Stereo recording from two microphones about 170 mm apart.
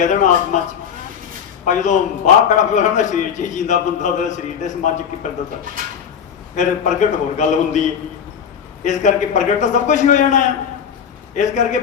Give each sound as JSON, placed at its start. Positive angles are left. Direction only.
{"t": 0.0, "sound": "a man's voice", "side_deg": 45}
{"t": 1.6, "sound": "a man's voice", "side_deg": 45}
{"t": 6.6, "sound": "a man's voice", "side_deg": 45}